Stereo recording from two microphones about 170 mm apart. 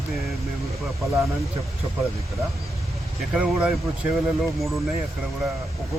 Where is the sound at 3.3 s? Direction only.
5° right (ahead or behind).